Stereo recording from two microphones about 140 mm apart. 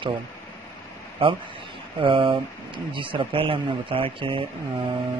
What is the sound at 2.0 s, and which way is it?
Speech, 40° right (ahead or behind).